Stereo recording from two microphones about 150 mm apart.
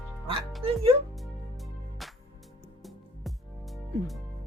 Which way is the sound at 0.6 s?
40° right (ahead or behind).